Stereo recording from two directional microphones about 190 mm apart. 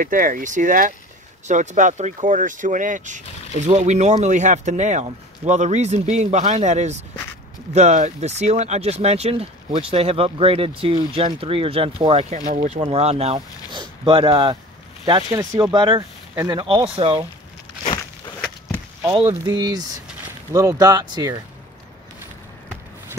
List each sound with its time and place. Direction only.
0.0 s speech: 45° right (ahead or behind)
13.7 s a sound: 25° right (ahead or behind)
15.0 s speech: 20° right (ahead or behind)
19.0 s speech: 25° right (ahead or behind)